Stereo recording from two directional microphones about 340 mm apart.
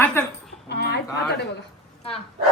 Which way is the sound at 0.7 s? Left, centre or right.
Left.